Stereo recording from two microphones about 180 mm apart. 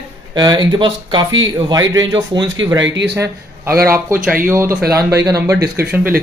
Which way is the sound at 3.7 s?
55° right (ahead or behind).